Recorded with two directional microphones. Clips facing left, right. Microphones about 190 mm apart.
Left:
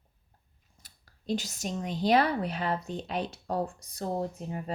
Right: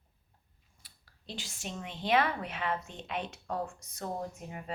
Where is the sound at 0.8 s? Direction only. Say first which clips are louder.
Left 12 dB; 45° left (ahead or behind).